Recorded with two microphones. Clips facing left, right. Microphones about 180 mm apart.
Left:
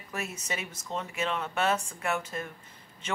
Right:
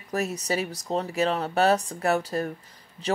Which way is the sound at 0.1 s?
35° right (ahead or behind).